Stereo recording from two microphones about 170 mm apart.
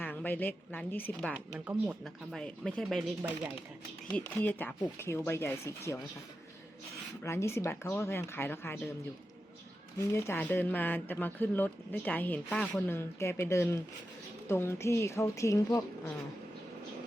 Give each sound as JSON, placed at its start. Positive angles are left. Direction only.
{"t": 0.0, "sound": "speech", "side_deg": 10}
{"t": 1.5, "sound": "speech", "side_deg": -10}
{"t": 2.4, "sound": "speech", "side_deg": 5}
{"t": 4.2, "sound": "speech", "side_deg": 10}
{"t": 7.3, "sound": "speech", "side_deg": 15}
{"t": 10.1, "sound": "speech", "side_deg": 15}